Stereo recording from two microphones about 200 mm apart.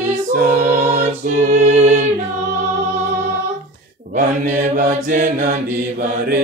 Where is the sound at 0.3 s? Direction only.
40° right (ahead or behind).